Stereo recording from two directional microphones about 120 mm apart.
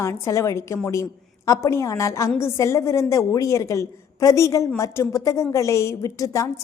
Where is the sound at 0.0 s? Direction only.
25° left (ahead or behind).